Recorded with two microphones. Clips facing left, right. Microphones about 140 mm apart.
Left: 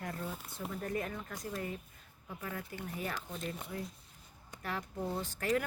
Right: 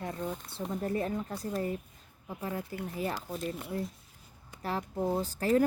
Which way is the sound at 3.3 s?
Centre (ahead or behind).